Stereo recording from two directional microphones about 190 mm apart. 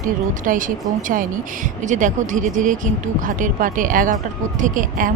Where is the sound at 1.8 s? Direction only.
40° right (ahead or behind).